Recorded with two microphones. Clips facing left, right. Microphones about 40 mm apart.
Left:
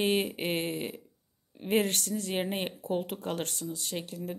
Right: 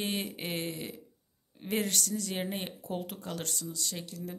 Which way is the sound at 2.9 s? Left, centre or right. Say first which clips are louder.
Left 5 dB; left.